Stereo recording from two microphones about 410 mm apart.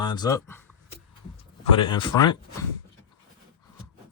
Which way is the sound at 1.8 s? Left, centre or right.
Centre.